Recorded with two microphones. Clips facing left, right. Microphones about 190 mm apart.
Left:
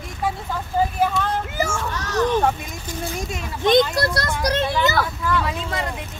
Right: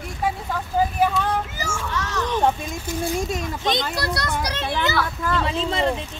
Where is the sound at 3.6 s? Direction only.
50° left (ahead or behind).